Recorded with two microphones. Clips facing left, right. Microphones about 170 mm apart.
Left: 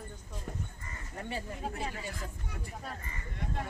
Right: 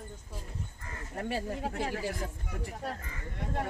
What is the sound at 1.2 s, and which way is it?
Speech, 65° right (ahead or behind).